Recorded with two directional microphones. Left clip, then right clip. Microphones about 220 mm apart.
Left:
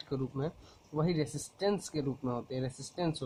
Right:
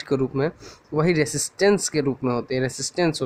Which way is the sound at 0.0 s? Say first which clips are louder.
Right 14 dB; 50° right (ahead or behind).